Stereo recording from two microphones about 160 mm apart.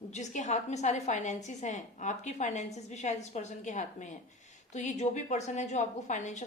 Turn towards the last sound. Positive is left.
turn(degrees=50)  # may be behind; listen again after turning